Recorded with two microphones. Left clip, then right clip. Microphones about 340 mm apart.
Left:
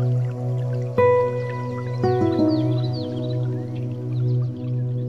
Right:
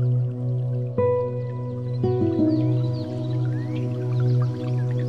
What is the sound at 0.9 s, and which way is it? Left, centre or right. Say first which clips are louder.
Music: left 5 dB; left.